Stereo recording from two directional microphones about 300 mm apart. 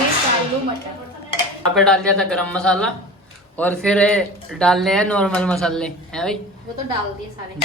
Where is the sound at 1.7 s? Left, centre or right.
Centre.